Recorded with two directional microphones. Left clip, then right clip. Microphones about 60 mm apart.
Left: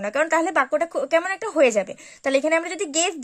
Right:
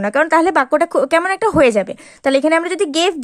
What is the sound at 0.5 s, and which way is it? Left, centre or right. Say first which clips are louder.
A woman's voice: right 7 dB; right.